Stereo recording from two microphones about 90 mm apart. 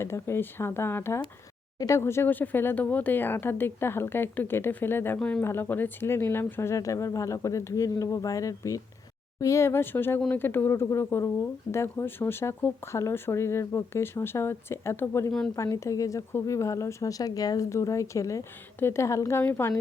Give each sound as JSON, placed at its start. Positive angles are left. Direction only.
{"t": 0.0, "sound": "speech", "side_deg": 30}